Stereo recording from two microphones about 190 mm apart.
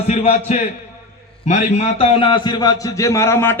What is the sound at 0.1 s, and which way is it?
A man's voice, 35° left (ahead or behind).